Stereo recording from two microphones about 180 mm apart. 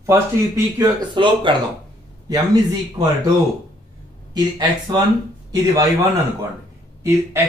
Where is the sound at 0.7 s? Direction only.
25° right (ahead or behind).